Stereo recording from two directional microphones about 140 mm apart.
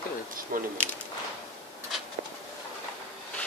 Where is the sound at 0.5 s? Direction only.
90° right.